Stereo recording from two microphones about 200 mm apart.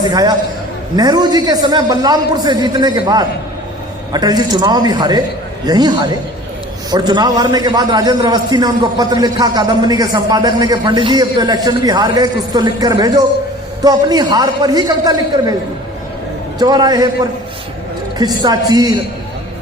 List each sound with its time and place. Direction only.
0.1 s a man's voice: 20° right (ahead or behind)
16.6 s a man's voice: 20° right (ahead or behind)
18.2 s a man's voice: 20° right (ahead or behind)